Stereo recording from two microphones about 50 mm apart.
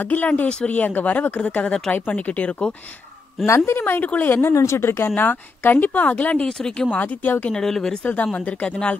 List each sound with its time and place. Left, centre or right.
0.0 s speech: left
0.5 s speech: centre
0.7 s speech: left
3.4 s speech: left
3.8 s speech: left
4.3 s speech: left
4.6 s speech: left
4.8 s speech: left
5.2 s speech: left
6.4 s speech: centre
7.0 s speech: left
7.5 s speech: centre
8.0 s speech: left